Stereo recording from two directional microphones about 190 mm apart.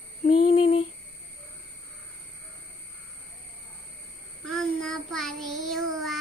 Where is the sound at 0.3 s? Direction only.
30° left (ahead or behind).